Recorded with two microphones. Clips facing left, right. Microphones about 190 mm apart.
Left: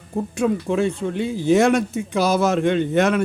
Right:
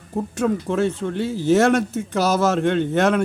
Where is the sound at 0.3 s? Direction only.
10° left (ahead or behind).